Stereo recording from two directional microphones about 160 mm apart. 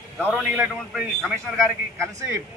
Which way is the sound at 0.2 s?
5° right (ahead or behind).